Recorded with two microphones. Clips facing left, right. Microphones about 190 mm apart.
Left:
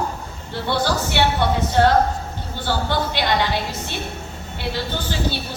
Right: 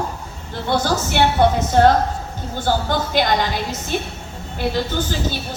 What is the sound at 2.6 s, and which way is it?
A woman's voice, 45° right (ahead or behind).